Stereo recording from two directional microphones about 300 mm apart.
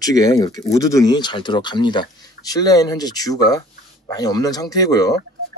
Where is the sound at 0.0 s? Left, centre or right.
Centre.